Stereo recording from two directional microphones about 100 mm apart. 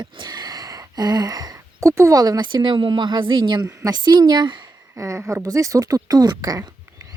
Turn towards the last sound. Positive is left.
turn(degrees=-35)  # may be behind; listen again after turning